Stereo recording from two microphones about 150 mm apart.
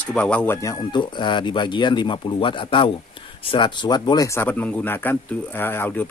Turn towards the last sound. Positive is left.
turn(degrees=15)  # may be behind; listen again after turning